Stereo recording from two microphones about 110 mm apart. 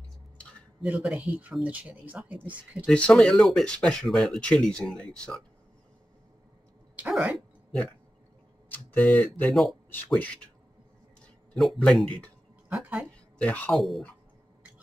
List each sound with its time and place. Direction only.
0.4 s a sound: 10° left (ahead or behind)
0.8 s speech: 10° right (ahead or behind)
2.9 s speech: 5° left (ahead or behind)
7.3 s dog: 10° left (ahead or behind)
8.6 s speech: 15° left (ahead or behind)
9.5 s speech: centre (ahead or behind)
10.1 s speech: 10° left (ahead or behind)
11.5 s speech: centre (ahead or behind)
12.6 s speech: 10° right (ahead or behind)
13.4 s speech: 10° left (ahead or behind)
13.7 s speech: centre (ahead or behind)